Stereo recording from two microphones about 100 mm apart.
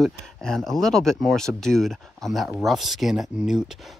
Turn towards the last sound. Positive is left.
turn(degrees=-5)  # may be behind; listen again after turning